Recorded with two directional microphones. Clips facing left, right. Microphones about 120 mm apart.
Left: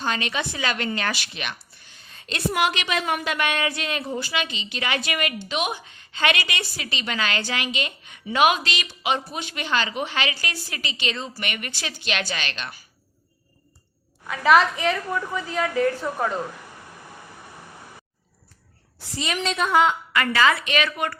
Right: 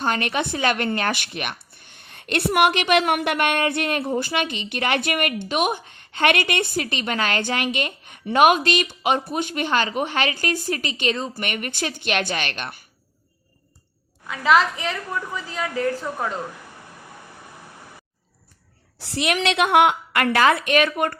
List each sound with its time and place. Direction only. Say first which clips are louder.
0.0 s speech: right 4 dB; 55° right (ahead or behind)
14.8 s a woman's voice: left 3 dB; 10° left (ahead or behind)
15.6 s a woman's voice: left 1 dB; centre (ahead or behind)
18.9 s a woman's voice: right 5 dB; 70° right (ahead or behind); by 21.2 s 45° right (ahead or behind)